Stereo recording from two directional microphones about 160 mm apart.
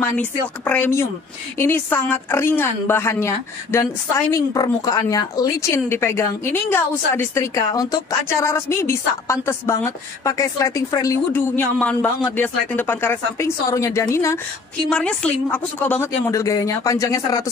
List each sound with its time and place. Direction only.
0.0 s speech: 10° left (ahead or behind)
14.9 s a woman's voice: 5° left (ahead or behind); by 17.5 s 20° left (ahead or behind)